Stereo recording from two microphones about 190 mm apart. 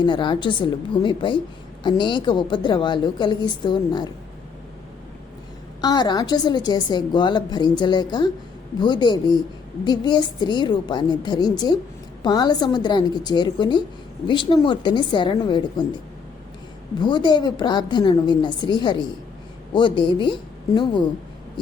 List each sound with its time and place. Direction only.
0.0 s a woman's voice: 25° left (ahead or behind)
5.8 s a woman's voice: 20° left (ahead or behind)
17.0 s a woman's voice: 25° left (ahead or behind)